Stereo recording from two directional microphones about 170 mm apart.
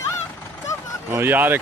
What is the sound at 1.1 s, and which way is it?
Speech, 10° right (ahead or behind).